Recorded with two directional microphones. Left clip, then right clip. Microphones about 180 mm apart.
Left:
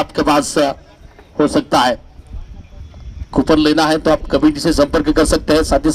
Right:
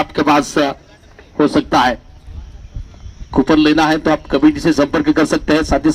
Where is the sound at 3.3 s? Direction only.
45° left (ahead or behind).